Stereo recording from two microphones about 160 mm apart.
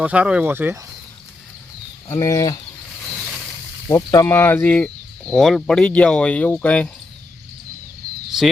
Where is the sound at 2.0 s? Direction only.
20° left (ahead or behind).